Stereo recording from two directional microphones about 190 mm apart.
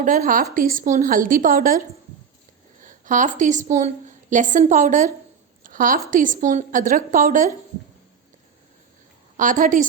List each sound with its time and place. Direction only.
0.0 s a woman's voice: 45° right (ahead or behind)
2.8 s a woman's voice: 45° right (ahead or behind)
9.4 s a woman's voice: 45° right (ahead or behind)